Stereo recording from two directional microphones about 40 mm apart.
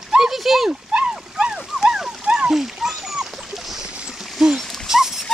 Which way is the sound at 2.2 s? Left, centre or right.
Right.